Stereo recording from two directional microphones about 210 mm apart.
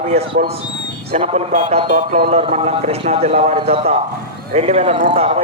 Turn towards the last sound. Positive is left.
turn(degrees=-30)  # may be behind; listen again after turning